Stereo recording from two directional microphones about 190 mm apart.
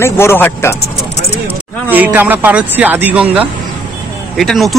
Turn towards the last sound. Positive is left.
turn(degrees=0)  # may be behind; listen again after turning